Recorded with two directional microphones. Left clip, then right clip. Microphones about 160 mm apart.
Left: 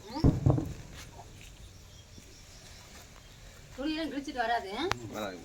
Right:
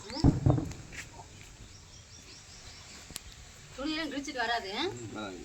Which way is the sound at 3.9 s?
5° right (ahead or behind).